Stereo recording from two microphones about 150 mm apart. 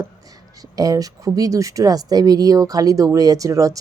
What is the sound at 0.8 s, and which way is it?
Speech, 25° right (ahead or behind).